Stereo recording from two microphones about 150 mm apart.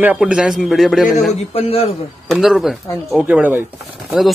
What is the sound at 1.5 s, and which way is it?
Speech, 40° left (ahead or behind).